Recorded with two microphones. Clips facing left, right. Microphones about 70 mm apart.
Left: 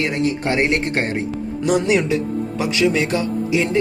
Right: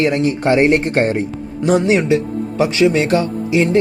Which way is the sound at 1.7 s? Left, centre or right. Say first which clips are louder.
Right 4 dB; right.